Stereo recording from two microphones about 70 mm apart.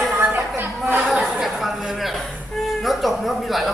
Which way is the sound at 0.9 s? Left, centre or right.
Centre.